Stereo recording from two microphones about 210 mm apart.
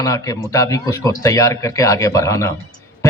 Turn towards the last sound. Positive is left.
turn(degrees=15)  # may be behind; listen again after turning